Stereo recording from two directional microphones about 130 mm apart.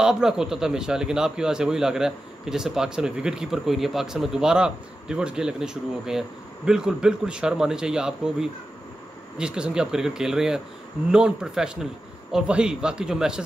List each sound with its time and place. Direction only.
0.0 s a man's voice: 5° right (ahead or behind)